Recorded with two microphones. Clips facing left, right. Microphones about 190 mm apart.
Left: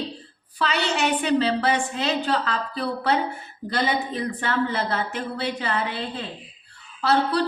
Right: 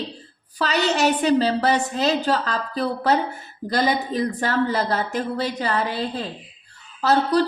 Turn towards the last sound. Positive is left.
turn(degrees=-40)  # may be behind; listen again after turning